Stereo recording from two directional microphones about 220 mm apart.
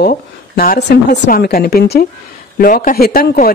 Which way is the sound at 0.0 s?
40° left (ahead or behind).